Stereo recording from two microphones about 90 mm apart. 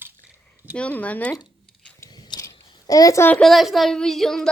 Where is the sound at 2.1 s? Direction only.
50° left (ahead or behind).